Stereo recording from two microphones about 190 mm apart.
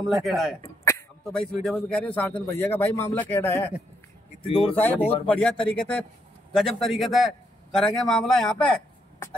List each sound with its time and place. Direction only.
0.0 s a man's voice: centre (ahead or behind)
0.6 s throat clearing: 15° left (ahead or behind)
1.2 s a man's voice: centre (ahead or behind)
4.4 s speech: 30° left (ahead or behind)
5.3 s a man's voice: 5° left (ahead or behind)